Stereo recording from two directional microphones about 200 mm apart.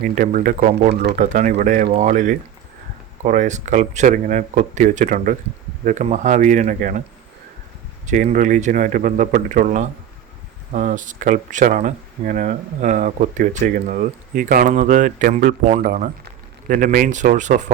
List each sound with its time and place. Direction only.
0.0 s speech: 45° right (ahead or behind)
8.0 s speech: 35° right (ahead or behind)